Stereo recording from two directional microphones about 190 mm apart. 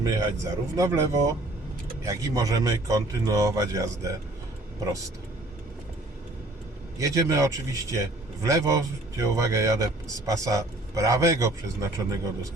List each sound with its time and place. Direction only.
0.0 s a man's voice: 15° right (ahead or behind)
7.0 s a man's voice: 15° right (ahead or behind)